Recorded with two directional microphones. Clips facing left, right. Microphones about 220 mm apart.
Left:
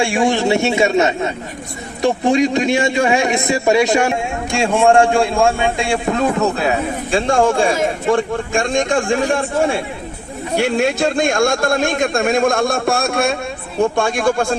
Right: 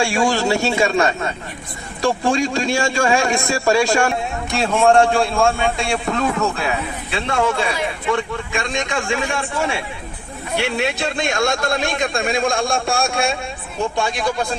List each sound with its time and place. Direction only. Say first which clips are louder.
0.0 s a man's voice: left 2 dB; 20° left (ahead or behind)
6.6 s a man's voice: left 5 dB; 40° left (ahead or behind)
12.8 s a man's voice: left 3 dB; 55° left (ahead or behind)